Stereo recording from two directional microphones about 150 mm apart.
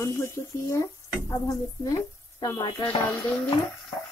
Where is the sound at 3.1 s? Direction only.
15° left (ahead or behind).